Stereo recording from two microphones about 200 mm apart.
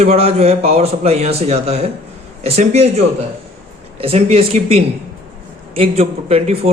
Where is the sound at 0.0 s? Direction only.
30° right (ahead or behind).